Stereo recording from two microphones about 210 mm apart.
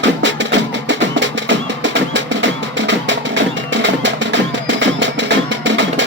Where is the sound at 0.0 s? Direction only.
60° right (ahead or behind).